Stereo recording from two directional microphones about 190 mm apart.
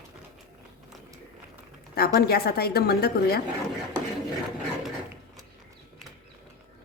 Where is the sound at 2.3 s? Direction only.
55° left (ahead or behind).